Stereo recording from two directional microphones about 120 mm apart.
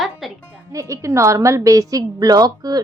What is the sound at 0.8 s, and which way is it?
A woman's voice, 25° right (ahead or behind).